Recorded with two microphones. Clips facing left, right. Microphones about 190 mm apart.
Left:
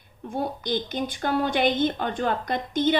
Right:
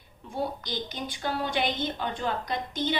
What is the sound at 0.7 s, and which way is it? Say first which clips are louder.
A woman's voice: left 7 dB; 50° left (ahead or behind).